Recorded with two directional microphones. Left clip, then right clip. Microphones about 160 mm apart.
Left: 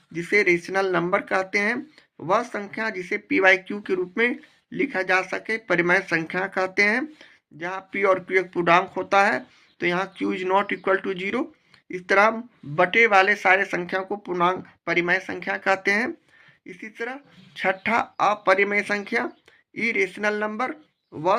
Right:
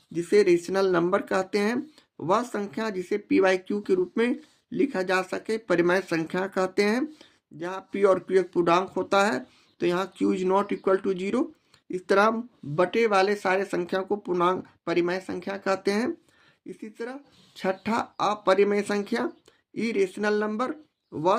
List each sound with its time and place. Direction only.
0.1 s speech: 35° right (ahead or behind)